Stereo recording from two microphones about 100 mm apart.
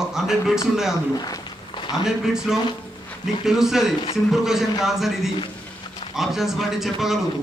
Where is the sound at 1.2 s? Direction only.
45° left (ahead or behind).